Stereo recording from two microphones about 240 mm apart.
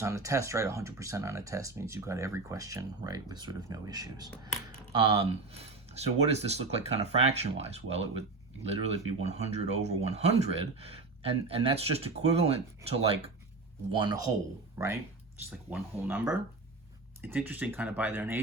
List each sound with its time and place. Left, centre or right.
0.0 s speech: centre